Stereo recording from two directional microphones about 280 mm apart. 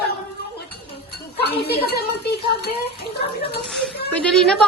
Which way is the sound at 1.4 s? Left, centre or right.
Left.